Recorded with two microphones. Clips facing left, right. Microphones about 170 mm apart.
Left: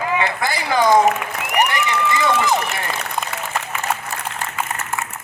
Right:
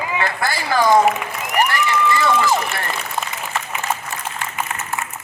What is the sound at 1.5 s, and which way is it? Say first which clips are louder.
Applause: right 1 dB; 20° left (ahead or behind).